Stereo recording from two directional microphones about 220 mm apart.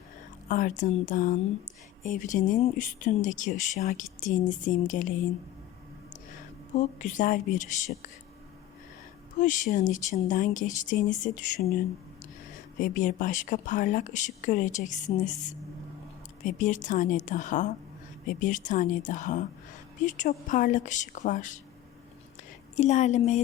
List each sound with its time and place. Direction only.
0.4 s speech: 35° left (ahead or behind)
6.7 s speech: 35° left (ahead or behind)
9.4 s speech: 35° left (ahead or behind)
12.8 s speech: 35° left (ahead or behind)
16.5 s speech: 35° left (ahead or behind)
22.7 s speech: 30° left (ahead or behind)